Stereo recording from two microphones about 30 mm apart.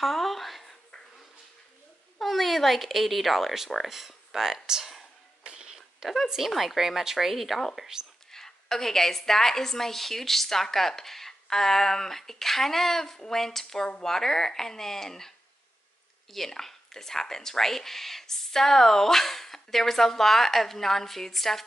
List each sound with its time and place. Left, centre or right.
0.0 s a sound: centre
2.1 s a woman's voice: centre
5.4 s a sound: right
6.2 s a woman's voice: centre
7.9 s speech: centre
8.3 s speech: centre
16.3 s speech: centre